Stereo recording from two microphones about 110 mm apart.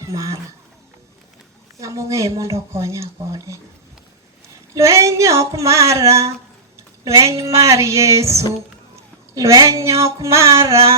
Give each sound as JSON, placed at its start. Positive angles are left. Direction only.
{"t": 0.0, "sound": "speech", "side_deg": -30}
{"t": 1.8, "sound": "speech", "side_deg": -30}
{"t": 4.7, "sound": "speech", "side_deg": -25}